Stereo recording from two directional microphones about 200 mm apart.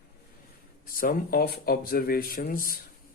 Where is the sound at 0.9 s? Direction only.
45° left (ahead or behind).